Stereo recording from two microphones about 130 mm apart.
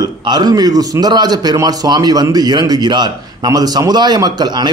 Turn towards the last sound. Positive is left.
turn(degrees=-30)  # may be behind; listen again after turning